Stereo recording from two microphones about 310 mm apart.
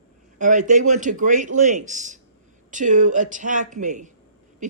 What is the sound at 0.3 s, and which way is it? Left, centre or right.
A man's voice, right.